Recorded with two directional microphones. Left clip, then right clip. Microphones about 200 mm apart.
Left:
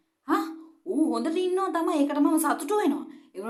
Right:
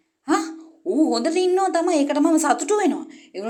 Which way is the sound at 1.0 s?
15° right (ahead or behind).